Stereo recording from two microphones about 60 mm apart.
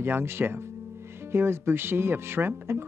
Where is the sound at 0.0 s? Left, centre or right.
Right.